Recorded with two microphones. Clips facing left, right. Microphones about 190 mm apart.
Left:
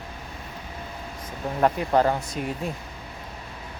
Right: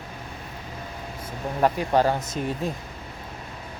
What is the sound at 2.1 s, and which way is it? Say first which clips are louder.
Speech: even; 20° right (ahead or behind).